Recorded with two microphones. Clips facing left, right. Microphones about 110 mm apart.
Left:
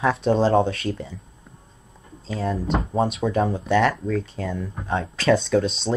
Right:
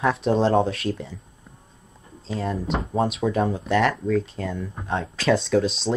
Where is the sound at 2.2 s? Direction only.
Centre (ahead or behind).